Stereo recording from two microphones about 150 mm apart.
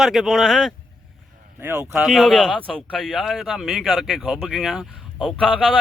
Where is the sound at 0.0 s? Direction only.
Centre (ahead or behind).